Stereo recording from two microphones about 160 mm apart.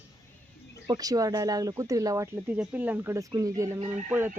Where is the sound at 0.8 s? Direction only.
25° right (ahead or behind).